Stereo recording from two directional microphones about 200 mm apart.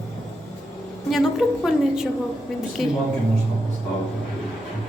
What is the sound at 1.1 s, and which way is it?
A woman's voice, centre (ahead or behind).